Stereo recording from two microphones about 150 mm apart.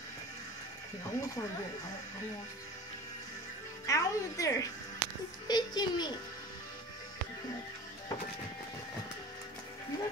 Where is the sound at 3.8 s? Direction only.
20° left (ahead or behind).